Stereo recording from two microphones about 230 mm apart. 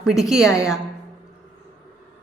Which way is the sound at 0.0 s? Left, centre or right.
Centre.